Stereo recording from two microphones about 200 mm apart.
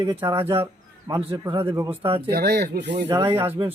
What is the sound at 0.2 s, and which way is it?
Speech, 10° right (ahead or behind).